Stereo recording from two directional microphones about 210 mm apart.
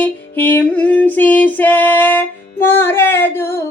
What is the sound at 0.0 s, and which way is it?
Music, 10° left (ahead or behind).